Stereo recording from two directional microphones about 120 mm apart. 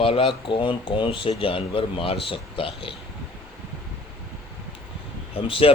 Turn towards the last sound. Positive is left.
turn(degrees=50)  # may be behind; listen again after turning